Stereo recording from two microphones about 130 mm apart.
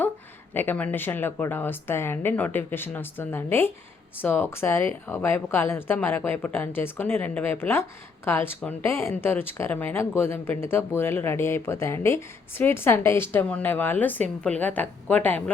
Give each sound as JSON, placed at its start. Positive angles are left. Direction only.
{"t": 0.5, "sound": "a woman's voice", "side_deg": 15}